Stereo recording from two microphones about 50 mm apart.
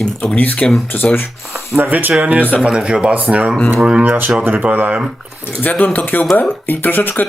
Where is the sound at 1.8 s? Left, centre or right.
Right.